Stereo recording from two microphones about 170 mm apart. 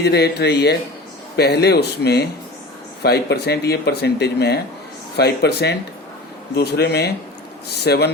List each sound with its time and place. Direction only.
0.0 s speech: 75° left (ahead or behind)